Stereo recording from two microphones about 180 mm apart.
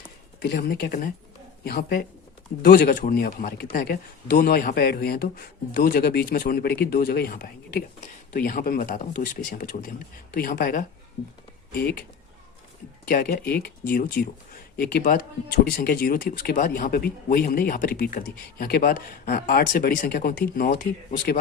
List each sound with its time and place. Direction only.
0.3 s a man's voice: 60° left (ahead or behind)
13.1 s a man's voice: 55° left (ahead or behind)